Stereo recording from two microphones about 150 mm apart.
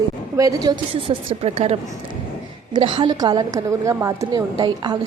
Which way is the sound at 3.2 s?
25° right (ahead or behind).